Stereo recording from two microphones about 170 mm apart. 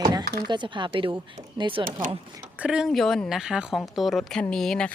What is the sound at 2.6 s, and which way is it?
A woman's voice, 5° right (ahead or behind).